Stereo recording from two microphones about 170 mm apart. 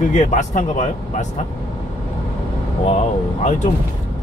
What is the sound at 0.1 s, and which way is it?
Speech, 45° left (ahead or behind).